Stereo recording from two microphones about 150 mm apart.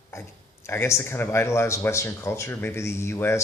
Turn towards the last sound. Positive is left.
turn(degrees=15)  # may be behind; listen again after turning